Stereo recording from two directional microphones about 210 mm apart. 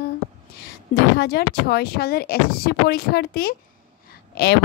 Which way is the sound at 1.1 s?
50° left (ahead or behind).